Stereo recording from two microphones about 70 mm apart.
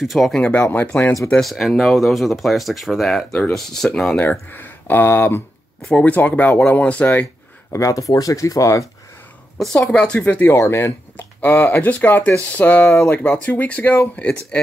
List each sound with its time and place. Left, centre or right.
0.0 s speech: centre
0.3 s speech: centre
0.6 s speech: left
1.4 s speech: centre
4.2 s speech: left
5.9 s speech: centre
7.7 s speech: left
9.8 s speech: centre
10.6 s speech: left
11.8 s speech: left